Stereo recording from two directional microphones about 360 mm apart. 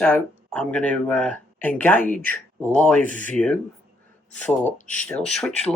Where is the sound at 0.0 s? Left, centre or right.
Centre.